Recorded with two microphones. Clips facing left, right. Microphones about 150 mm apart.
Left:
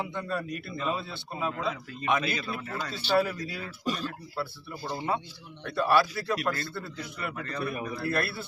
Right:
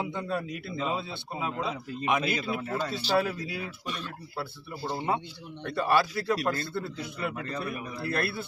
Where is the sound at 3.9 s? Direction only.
35° left (ahead or behind).